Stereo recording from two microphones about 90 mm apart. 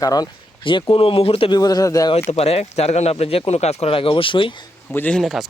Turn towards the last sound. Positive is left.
turn(degrees=0)  # may be behind; listen again after turning